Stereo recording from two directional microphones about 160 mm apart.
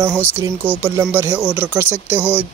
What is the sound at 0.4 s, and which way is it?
Speech, 15° right (ahead or behind).